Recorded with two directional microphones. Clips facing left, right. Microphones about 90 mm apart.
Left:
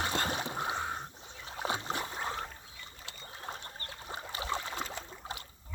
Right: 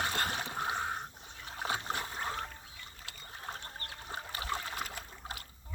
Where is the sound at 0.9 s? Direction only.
20° left (ahead or behind).